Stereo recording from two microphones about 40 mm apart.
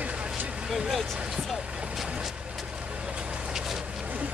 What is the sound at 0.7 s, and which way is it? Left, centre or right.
Speech, centre.